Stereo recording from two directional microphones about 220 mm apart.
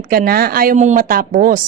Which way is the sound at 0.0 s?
40° right (ahead or behind).